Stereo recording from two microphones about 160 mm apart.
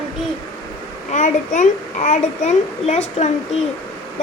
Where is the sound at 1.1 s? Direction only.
50° left (ahead or behind).